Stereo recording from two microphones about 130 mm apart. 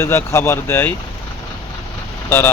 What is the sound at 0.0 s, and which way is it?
Speech, 20° left (ahead or behind).